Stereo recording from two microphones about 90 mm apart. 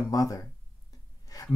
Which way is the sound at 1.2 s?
40° left (ahead or behind).